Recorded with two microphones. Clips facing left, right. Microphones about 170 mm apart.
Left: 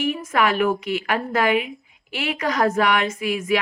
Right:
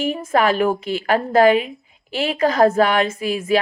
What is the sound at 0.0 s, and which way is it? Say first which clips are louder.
A woman's voice: right 3 dB; 30° right (ahead or behind).